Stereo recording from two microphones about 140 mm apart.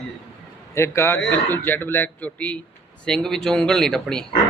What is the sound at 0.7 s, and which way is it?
Speech, 20° left (ahead or behind).